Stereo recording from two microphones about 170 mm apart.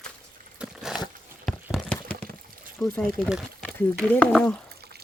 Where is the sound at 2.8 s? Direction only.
Centre (ahead or behind).